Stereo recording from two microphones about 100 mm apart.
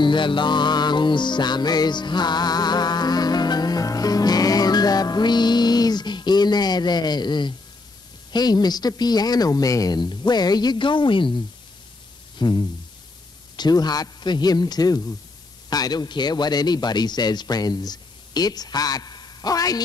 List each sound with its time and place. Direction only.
0.0 s music: 55° left (ahead or behind)
8.3 s speech: 45° left (ahead or behind)